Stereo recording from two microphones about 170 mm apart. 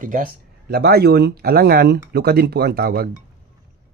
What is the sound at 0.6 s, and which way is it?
Speech, 70° right (ahead or behind).